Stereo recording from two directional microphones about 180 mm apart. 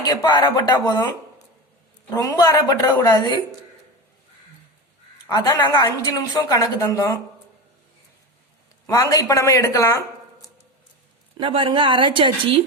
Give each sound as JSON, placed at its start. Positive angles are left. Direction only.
{"t": 0.0, "sound": "a woman's voice", "side_deg": 20}
{"t": 2.1, "sound": "a woman's voice", "side_deg": 20}
{"t": 5.3, "sound": "a woman's voice", "side_deg": 20}
{"t": 8.9, "sound": "speech", "side_deg": 20}
{"t": 11.3, "sound": "a woman's voice", "side_deg": -30}